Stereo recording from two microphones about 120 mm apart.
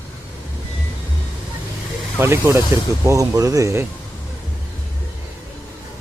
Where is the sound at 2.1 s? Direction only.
20° right (ahead or behind).